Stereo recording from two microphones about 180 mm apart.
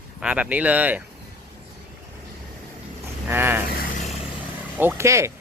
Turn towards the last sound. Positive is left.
turn(degrees=-15)  # may be behind; listen again after turning